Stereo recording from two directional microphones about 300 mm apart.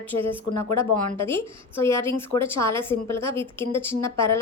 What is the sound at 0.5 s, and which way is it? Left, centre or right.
Speech, left.